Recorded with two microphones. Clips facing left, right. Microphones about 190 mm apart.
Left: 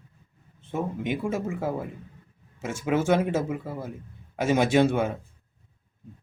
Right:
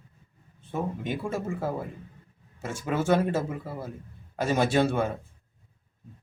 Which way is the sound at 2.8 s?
15° left (ahead or behind).